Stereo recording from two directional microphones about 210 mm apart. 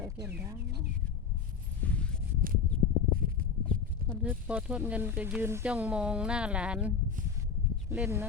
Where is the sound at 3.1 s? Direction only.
45° right (ahead or behind).